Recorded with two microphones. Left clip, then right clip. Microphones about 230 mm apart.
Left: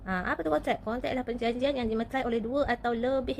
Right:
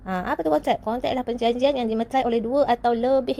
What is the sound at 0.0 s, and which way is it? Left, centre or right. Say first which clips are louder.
A woman's voice: right 6 dB; right.